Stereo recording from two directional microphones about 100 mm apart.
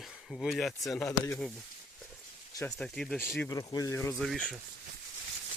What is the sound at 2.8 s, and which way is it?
Speech, 5° left (ahead or behind).